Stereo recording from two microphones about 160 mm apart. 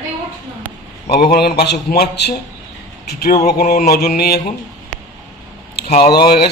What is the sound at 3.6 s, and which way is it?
Mantra, 50° left (ahead or behind).